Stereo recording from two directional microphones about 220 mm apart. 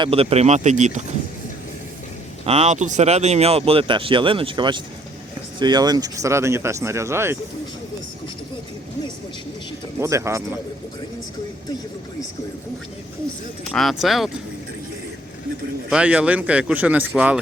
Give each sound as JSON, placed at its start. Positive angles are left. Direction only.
{"t": 0.0, "sound": "speech", "side_deg": -25}
{"t": 2.5, "sound": "speech", "side_deg": -30}
{"t": 10.0, "sound": "speech", "side_deg": -15}
{"t": 13.7, "sound": "speech", "side_deg": 0}
{"t": 15.9, "sound": "speech", "side_deg": -5}